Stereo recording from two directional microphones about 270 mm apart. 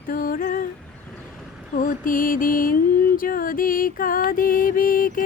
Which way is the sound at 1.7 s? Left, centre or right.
Left.